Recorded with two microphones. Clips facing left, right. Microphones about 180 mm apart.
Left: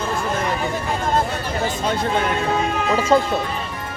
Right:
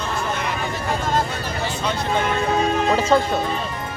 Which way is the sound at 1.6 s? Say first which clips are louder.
Left 3 dB; 50° left (ahead or behind).